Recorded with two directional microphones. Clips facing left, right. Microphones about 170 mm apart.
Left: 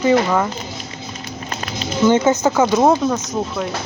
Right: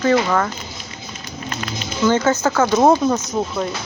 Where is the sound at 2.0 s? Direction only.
15° left (ahead or behind).